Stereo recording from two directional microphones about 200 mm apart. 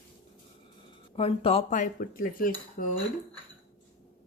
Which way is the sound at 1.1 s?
30° left (ahead or behind).